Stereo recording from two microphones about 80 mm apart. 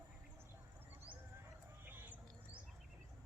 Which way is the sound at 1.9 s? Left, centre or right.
Right.